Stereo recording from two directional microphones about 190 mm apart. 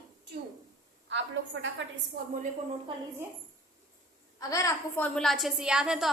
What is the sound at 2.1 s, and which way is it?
Speech, 55° right (ahead or behind).